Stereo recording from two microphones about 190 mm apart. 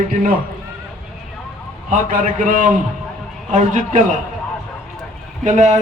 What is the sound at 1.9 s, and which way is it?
A man's voice, 40° right (ahead or behind).